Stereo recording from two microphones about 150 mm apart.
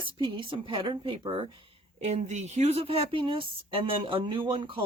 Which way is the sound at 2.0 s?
50° right (ahead or behind).